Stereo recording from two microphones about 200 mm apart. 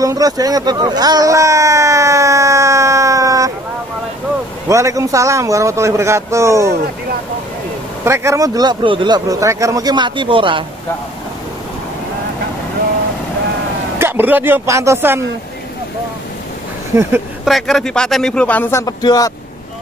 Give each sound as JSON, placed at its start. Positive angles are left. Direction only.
{"t": 0.0, "sound": "a sound", "side_deg": -20}
{"t": 4.6, "sound": "speech", "side_deg": -15}
{"t": 8.0, "sound": "speech", "side_deg": -15}
{"t": 13.9, "sound": "speech", "side_deg": -10}
{"t": 16.9, "sound": "speech", "side_deg": -15}
{"t": 17.5, "sound": "speech", "side_deg": 0}